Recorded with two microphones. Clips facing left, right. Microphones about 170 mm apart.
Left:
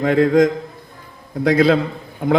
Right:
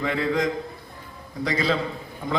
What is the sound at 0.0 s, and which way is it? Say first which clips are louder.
A man's voice: left 10 dB; 45° left (ahead or behind).